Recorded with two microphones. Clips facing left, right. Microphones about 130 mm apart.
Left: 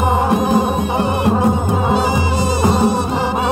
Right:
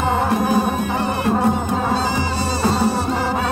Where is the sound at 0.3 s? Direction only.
20° left (ahead or behind).